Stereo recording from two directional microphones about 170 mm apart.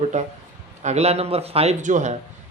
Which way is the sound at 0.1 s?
45° right (ahead or behind).